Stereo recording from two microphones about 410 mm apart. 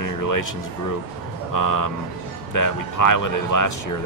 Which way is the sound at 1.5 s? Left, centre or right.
Left.